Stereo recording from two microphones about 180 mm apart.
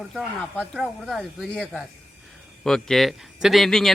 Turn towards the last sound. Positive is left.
turn(degrees=0)  # may be behind; listen again after turning